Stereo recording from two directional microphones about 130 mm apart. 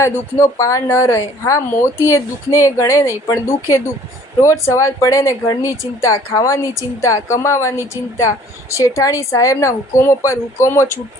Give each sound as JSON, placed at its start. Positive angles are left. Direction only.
{"t": 0.0, "sound": "speech", "side_deg": 20}